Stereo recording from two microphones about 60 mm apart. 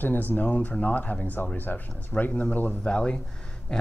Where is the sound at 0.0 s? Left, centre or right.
Left.